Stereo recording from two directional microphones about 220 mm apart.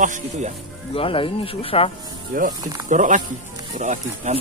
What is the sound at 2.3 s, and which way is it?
Speech, 40° right (ahead or behind).